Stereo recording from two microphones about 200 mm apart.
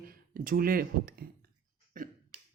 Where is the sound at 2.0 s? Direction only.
40° right (ahead or behind).